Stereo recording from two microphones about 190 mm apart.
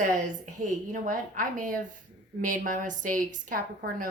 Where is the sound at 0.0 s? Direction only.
40° right (ahead or behind).